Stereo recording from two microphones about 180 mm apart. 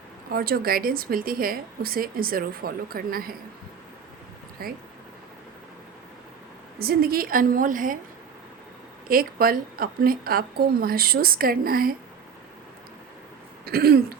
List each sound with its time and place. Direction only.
0.3 s a woman's voice: 55° right (ahead or behind)
4.6 s a woman's voice: 55° right (ahead or behind)
6.7 s a woman's voice: 55° right (ahead or behind)
9.0 s a woman's voice: 55° right (ahead or behind)
13.7 s a woman's voice: 60° right (ahead or behind)